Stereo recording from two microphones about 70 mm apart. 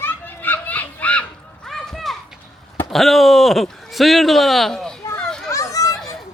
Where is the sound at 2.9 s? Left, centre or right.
Centre.